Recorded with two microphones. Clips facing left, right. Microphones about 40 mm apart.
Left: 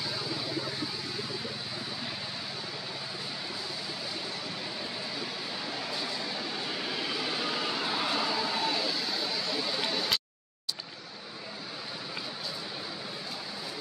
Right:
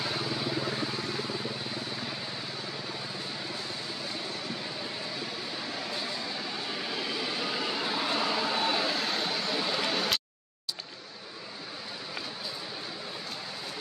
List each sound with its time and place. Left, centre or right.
0.0 s vehicle: right
5.7 s vehicle: centre
8.5 s vehicle: right
9.4 s a sound: right